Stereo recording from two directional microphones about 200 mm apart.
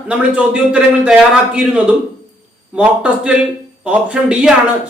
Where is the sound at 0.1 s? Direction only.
5° right (ahead or behind).